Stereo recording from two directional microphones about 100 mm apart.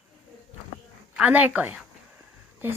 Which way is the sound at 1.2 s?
15° right (ahead or behind).